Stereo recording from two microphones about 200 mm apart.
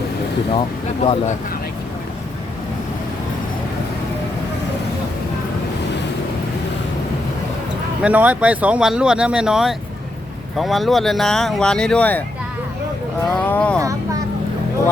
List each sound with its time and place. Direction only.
1.0 s speech: 30° left (ahead or behind)
8.0 s speech: 5° right (ahead or behind)
13.3 s speech: 5° left (ahead or behind)
13.7 s speech: 15° right (ahead or behind)